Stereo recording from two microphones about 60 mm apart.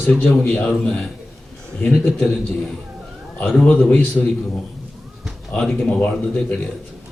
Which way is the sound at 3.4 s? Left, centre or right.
Left.